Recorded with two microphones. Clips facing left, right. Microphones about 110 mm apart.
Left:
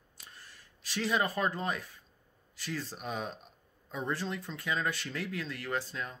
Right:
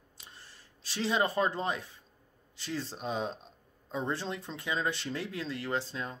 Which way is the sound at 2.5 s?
25° right (ahead or behind).